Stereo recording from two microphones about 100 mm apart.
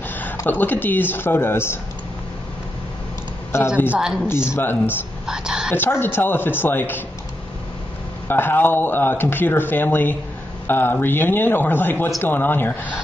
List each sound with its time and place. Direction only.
0.5 s speech: 20° left (ahead or behind)
3.5 s speech: 25° left (ahead or behind)
3.9 s a woman's voice: 5° right (ahead or behind)
4.3 s speech: 25° left (ahead or behind)
5.2 s speech: 5° right (ahead or behind)
5.8 s speech: 20° left (ahead or behind)
8.3 s speech: 20° left (ahead or behind)